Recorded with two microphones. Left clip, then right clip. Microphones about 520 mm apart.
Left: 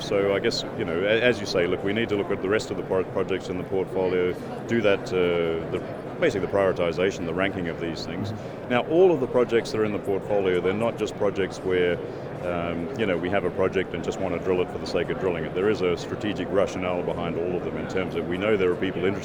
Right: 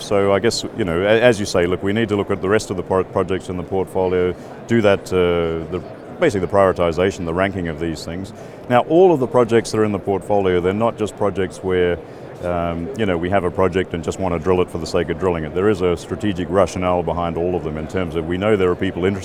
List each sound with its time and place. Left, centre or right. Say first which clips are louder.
0.1 s speech: right 7 dB; right